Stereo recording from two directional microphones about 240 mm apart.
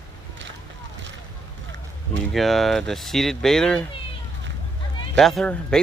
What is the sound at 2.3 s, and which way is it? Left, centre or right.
Speech, centre.